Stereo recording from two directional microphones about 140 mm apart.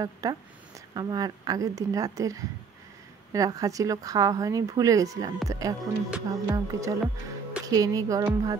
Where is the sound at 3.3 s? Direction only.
25° right (ahead or behind).